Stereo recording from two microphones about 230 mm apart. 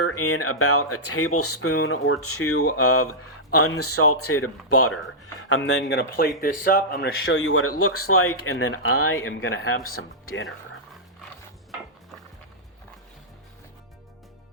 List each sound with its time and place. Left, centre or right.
0.0 s speech: left
5.7 s speech: left
7.1 s speech: left